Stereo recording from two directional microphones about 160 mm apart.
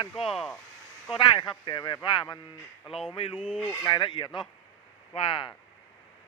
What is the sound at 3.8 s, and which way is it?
Speech, 30° left (ahead or behind).